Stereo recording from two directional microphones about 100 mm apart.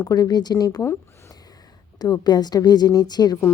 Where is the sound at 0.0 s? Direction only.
40° left (ahead or behind).